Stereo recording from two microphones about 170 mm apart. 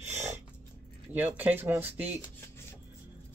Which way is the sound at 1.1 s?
10° right (ahead or behind).